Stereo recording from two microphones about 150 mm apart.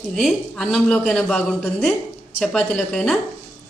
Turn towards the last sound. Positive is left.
turn(degrees=5)  # may be behind; listen again after turning